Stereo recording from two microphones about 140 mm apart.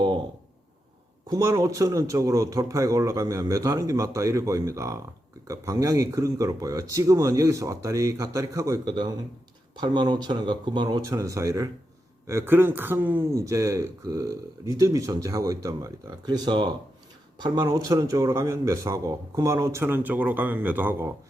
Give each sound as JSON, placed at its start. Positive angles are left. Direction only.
{"t": 1.3, "sound": "speech", "side_deg": -25}